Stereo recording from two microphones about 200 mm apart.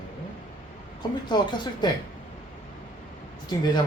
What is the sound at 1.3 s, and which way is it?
Speech, 20° left (ahead or behind).